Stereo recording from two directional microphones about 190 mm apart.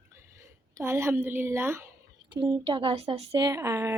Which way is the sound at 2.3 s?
25° right (ahead or behind).